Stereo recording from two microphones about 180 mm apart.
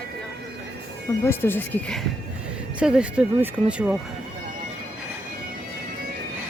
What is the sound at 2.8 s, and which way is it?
Speech, 5° right (ahead or behind).